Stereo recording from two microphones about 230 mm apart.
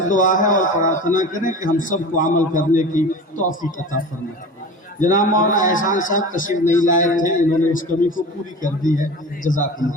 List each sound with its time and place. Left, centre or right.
0.1 s a man's voice: left
9.4 s a man's voice: left